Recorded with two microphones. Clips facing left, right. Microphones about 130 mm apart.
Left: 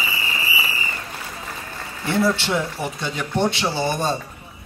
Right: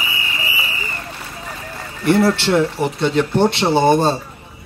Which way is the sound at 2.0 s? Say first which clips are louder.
Right 6 dB; 70° right (ahead or behind).